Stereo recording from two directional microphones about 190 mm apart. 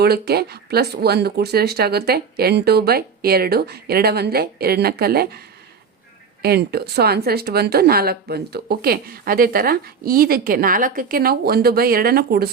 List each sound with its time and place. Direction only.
0.0 s speech: 55° right (ahead or behind)
6.4 s a woman's voice: 55° right (ahead or behind)